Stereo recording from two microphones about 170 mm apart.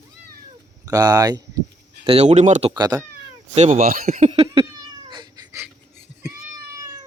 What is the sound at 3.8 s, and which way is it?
Speech, 60° right (ahead or behind).